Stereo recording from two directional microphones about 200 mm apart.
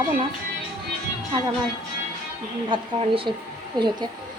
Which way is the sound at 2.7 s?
25° right (ahead or behind).